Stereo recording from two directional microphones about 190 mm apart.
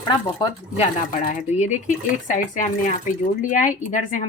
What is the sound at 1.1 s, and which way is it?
Speech, 40° left (ahead or behind).